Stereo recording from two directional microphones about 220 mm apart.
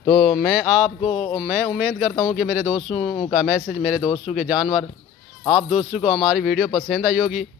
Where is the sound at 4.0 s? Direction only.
30° left (ahead or behind).